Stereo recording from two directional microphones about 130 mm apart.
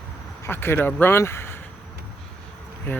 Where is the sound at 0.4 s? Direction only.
20° left (ahead or behind).